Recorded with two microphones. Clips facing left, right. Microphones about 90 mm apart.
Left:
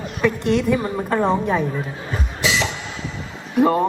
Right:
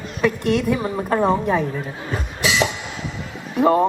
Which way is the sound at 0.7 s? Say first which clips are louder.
Even; 15° right (ahead or behind).